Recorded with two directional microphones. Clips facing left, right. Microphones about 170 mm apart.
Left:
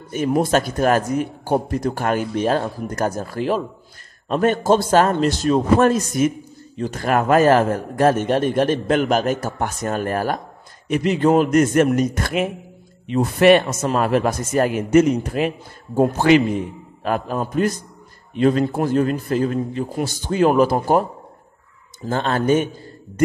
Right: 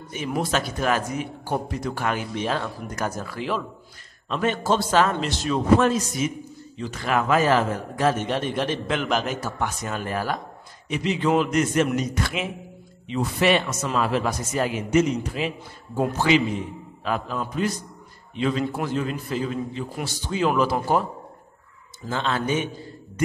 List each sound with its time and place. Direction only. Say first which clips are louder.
0.1 s a man's voice: left 8 dB; 45° left (ahead or behind)
22.0 s a man's voice: left 6 dB; 45° left (ahead or behind)